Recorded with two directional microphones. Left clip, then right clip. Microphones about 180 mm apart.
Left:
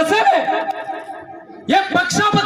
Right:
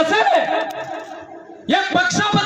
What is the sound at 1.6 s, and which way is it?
Speech, 35° left (ahead or behind).